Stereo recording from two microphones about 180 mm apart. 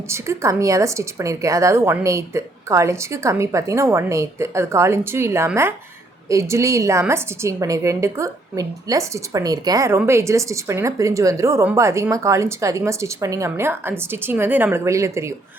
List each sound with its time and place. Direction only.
0.1 s a woman's voice: 15° right (ahead or behind)